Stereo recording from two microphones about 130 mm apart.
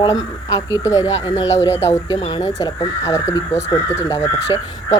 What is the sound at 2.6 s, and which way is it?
Speech, 25° left (ahead or behind).